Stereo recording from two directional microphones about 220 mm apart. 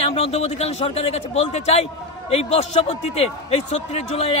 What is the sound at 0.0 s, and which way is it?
A man's voice, 25° left (ahead or behind).